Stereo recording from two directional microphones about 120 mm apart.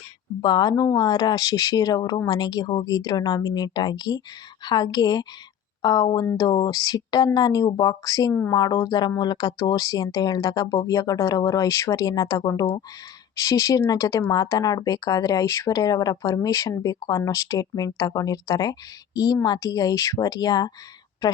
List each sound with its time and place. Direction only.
0.4 s speech: 35° left (ahead or behind)
13.4 s speech: 25° left (ahead or behind)